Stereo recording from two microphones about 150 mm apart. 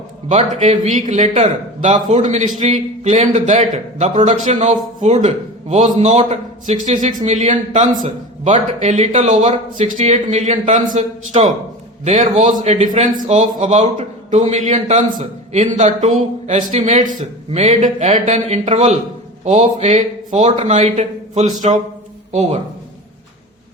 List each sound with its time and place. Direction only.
0.3 s a man's voice: 50° right (ahead or behind)